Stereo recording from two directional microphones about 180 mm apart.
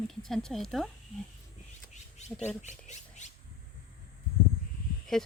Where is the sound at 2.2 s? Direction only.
40° left (ahead or behind).